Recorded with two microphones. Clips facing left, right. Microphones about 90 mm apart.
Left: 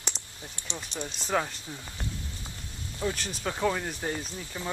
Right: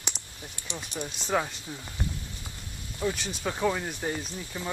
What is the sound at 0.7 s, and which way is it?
Speech, 5° right (ahead or behind).